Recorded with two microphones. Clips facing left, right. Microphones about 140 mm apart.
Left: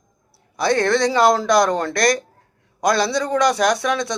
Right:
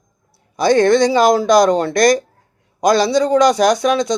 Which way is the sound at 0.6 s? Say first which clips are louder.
Right 6 dB; 20° right (ahead or behind).